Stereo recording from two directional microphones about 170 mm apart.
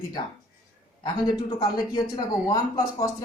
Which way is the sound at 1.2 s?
25° left (ahead or behind).